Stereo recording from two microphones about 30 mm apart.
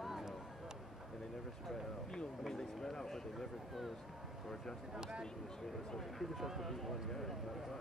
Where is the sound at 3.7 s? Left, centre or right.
Centre.